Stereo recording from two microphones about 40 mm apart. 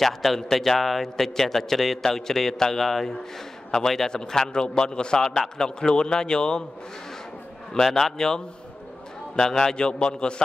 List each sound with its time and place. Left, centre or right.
0.0 s a man's voice: centre
7.7 s a man's voice: centre
9.4 s a man's voice: centre